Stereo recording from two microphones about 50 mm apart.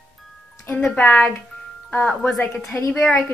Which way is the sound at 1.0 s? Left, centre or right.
Left.